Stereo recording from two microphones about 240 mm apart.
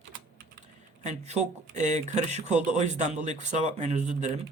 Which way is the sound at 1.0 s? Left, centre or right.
Right.